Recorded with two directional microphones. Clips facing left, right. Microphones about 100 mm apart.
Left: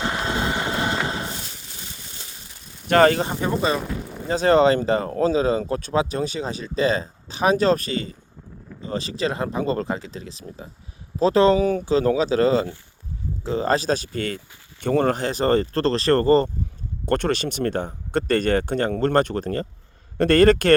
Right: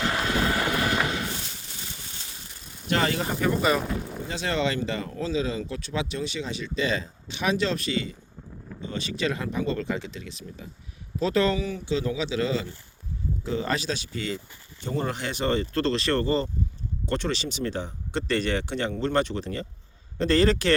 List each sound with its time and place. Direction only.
0.0 s vehicle: 25° left (ahead or behind)
2.8 s speech: 50° left (ahead or behind)
3.2 s speech: 25° left (ahead or behind)
3.8 s speech: centre (ahead or behind)
4.3 s speech: 40° left (ahead or behind); by 15.1 s 60° left (ahead or behind)
15.1 s a man's voice: 40° left (ahead or behind)